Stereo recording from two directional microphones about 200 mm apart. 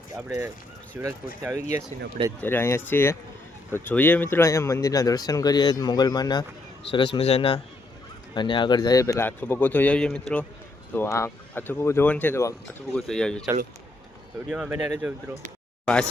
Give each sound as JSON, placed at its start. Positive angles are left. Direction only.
{"t": 0.3, "sound": "speech", "side_deg": -15}
{"t": 2.4, "sound": "a man's voice", "side_deg": 10}
{"t": 13.0, "sound": "speech", "side_deg": 0}
{"t": 14.5, "sound": "speech", "side_deg": -5}